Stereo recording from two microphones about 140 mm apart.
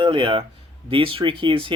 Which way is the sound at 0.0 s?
35° right (ahead or behind).